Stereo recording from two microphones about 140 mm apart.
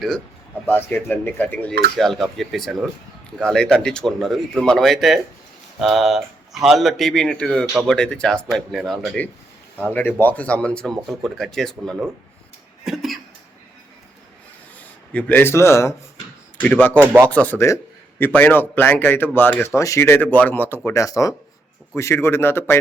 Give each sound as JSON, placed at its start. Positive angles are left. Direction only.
{"t": 0.7, "sound": "speech", "side_deg": 15}
{"t": 2.0, "sound": "speech", "side_deg": 0}
{"t": 12.8, "sound": "cough", "side_deg": 0}
{"t": 15.1, "sound": "speech", "side_deg": 15}
{"t": 17.0, "sound": "speech", "side_deg": -15}
{"t": 17.2, "sound": "speech", "side_deg": 10}